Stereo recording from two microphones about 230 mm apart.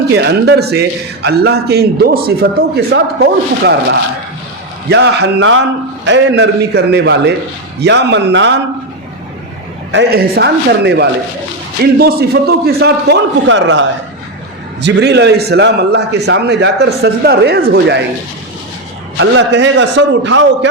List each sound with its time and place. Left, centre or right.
0.1 s a man's voice: right
9.9 s a man's voice: right
19.1 s a man's voice: right